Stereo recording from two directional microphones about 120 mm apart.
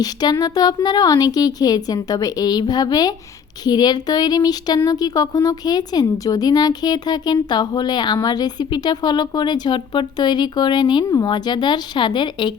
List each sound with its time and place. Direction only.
0.0 s a woman's voice: 35° left (ahead or behind)